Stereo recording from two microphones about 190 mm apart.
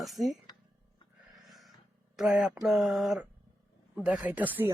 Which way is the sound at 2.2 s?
5° right (ahead or behind).